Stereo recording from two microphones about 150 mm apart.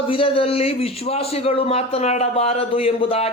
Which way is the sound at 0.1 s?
35° left (ahead or behind).